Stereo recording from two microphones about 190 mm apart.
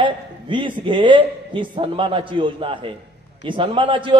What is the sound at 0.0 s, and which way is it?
A man's voice, 25° right (ahead or behind).